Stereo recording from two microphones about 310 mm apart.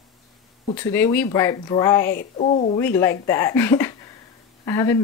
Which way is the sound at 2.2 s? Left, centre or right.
Left.